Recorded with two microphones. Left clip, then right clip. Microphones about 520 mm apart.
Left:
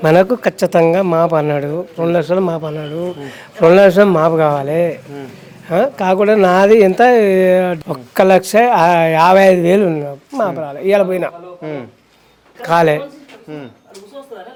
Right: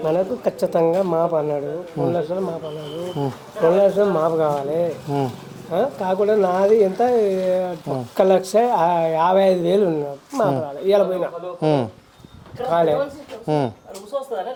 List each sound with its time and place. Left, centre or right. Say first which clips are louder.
0.0 s a man's voice: left 9 dB; left
3.7 s speech: left 8 dB; left
11.6 s speech: right 7 dB; right
12.6 s a man's voice: left 6 dB; left